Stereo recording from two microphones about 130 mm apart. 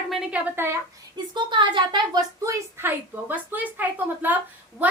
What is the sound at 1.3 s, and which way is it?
Speech, 35° right (ahead or behind).